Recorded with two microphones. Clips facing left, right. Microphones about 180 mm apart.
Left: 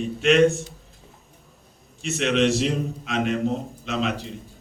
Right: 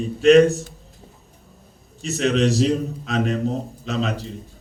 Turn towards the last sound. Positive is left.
turn(degrees=-35)  # may be behind; listen again after turning